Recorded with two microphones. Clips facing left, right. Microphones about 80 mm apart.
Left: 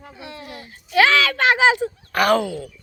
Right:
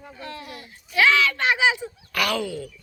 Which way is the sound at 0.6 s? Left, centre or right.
Left.